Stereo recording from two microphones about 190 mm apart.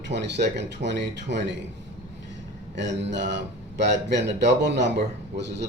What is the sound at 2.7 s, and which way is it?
Speech, 65° right (ahead or behind).